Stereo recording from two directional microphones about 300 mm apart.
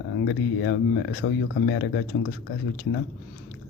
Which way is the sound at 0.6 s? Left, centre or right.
Left.